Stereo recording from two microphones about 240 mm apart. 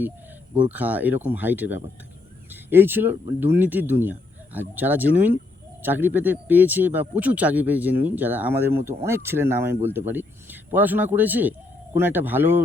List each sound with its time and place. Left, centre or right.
0.7 s speech: centre